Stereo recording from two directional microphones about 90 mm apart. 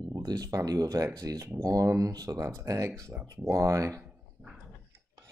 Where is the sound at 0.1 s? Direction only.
40° right (ahead or behind).